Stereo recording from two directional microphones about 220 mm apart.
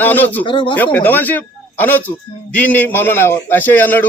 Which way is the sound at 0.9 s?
10° left (ahead or behind).